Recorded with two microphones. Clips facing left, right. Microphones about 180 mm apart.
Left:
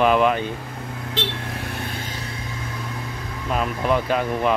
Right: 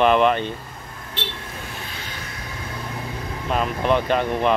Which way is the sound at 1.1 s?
65° left (ahead or behind).